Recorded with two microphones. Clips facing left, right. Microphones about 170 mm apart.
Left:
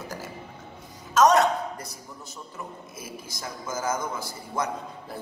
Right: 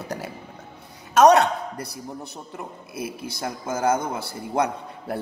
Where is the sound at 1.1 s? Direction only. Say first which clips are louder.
Right 4 dB; 65° right (ahead or behind).